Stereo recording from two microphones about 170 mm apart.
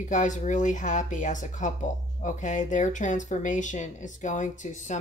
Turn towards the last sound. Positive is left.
turn(degrees=45)  # may be behind; listen again after turning